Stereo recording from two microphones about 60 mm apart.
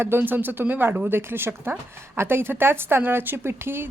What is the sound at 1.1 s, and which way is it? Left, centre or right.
A woman's voice, right.